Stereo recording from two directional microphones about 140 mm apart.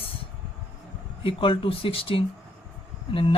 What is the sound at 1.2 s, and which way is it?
Speech, 40° left (ahead or behind).